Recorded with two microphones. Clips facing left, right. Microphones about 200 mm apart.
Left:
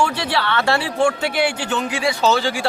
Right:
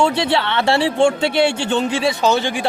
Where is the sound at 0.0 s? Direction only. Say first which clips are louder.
Right 4 dB; 25° right (ahead or behind).